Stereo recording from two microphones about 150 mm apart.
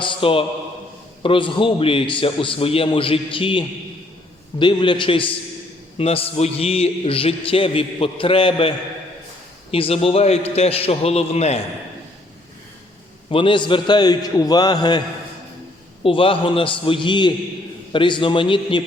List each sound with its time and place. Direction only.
0.0 s a sound: 35° left (ahead or behind)
1.2 s a man's voice: 35° left (ahead or behind)
4.6 s a man's voice: 30° left (ahead or behind)
9.7 s a man's voice: 40° left (ahead or behind)
13.3 s a man's voice: 35° left (ahead or behind)
16.0 s a man's voice: 35° left (ahead or behind)